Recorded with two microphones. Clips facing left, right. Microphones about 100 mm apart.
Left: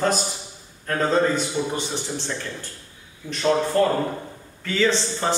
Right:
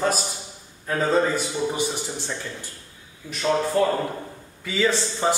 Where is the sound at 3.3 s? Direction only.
5° right (ahead or behind).